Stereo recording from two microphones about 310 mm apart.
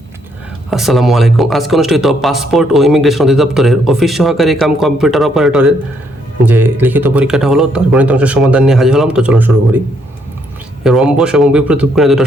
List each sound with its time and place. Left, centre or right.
0.7 s speech: centre
10.8 s speech: centre